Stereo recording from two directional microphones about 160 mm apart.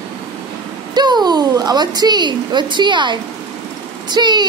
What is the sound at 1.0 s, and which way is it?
Speech, 25° right (ahead or behind).